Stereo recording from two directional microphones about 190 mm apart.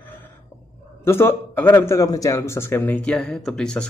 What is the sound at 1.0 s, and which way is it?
A man's voice, 10° left (ahead or behind).